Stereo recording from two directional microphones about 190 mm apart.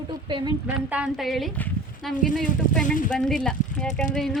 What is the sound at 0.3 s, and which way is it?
Speech, 25° right (ahead or behind).